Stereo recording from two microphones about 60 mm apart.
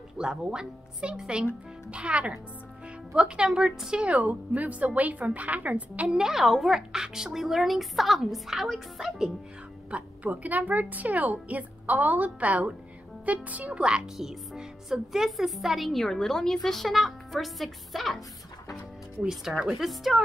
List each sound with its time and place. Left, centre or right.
0.2 s speech: centre
1.9 s a woman's voice: centre
6.0 s a woman's voice: centre
9.8 s a woman's voice: right
14.1 s a woman's voice: centre
19.5 s a woman's voice: centre